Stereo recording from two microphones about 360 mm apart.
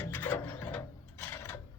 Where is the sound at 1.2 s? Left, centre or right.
Centre.